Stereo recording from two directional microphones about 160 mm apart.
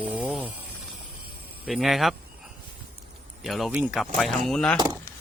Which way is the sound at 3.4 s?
Centre (ahead or behind).